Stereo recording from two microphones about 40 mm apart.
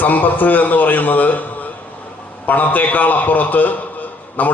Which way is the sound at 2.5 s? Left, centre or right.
Left.